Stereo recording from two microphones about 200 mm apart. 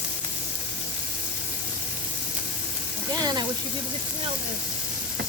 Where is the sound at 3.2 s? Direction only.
20° right (ahead or behind).